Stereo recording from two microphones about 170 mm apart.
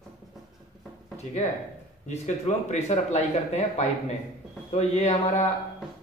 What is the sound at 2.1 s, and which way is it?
Speech, 40° left (ahead or behind).